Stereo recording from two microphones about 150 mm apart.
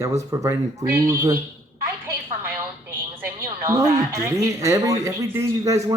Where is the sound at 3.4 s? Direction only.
20° right (ahead or behind).